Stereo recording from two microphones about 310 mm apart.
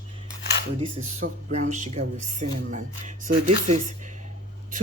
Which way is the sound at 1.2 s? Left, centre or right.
Right.